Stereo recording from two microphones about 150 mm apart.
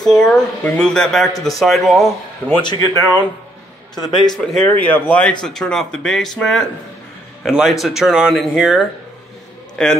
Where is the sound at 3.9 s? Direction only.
25° left (ahead or behind).